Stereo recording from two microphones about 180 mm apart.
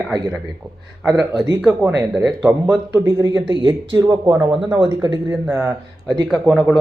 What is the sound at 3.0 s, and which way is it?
Speech, 15° right (ahead or behind).